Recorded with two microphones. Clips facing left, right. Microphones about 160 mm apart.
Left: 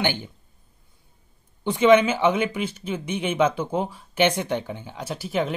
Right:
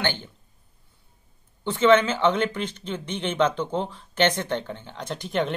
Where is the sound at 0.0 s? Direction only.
15° left (ahead or behind).